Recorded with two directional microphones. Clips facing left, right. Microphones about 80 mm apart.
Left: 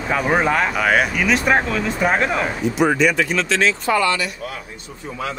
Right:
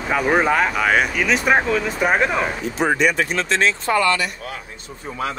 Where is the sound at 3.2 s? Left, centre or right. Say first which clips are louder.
Left 1 dB; right.